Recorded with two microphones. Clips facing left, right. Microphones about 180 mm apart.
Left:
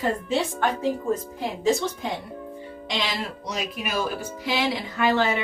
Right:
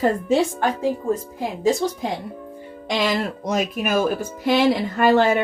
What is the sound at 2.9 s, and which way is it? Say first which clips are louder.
Speech: right 8 dB; 50° right (ahead or behind).